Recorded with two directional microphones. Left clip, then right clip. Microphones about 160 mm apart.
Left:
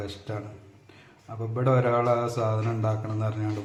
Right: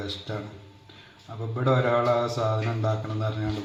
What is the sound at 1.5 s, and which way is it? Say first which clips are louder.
Mantra: even; 15° left (ahead or behind).